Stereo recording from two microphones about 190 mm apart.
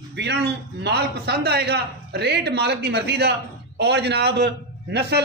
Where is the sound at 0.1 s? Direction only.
65° right (ahead or behind).